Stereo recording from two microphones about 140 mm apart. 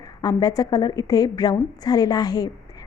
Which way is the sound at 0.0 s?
25° left (ahead or behind).